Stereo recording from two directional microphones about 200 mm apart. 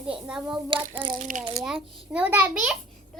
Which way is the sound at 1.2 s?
40° right (ahead or behind).